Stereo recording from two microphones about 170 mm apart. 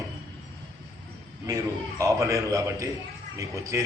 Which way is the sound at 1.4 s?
20° right (ahead or behind).